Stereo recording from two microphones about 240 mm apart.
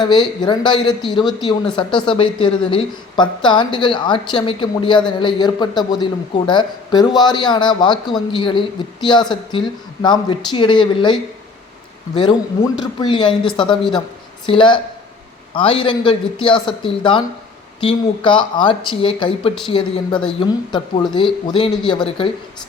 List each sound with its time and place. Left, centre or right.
0.0 s a woman's voice: centre